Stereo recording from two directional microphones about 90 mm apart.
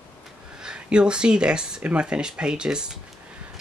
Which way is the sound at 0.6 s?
10° right (ahead or behind).